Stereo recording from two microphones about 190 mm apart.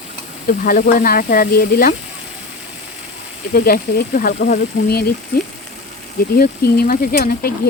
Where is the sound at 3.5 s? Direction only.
50° left (ahead or behind).